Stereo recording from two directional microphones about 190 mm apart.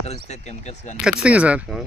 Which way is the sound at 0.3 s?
35° left (ahead or behind).